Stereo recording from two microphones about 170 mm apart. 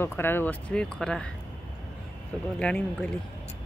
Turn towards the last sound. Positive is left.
turn(degrees=5)  # may be behind; listen again after turning